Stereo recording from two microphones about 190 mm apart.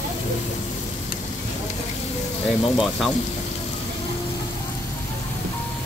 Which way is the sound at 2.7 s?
Centre (ahead or behind).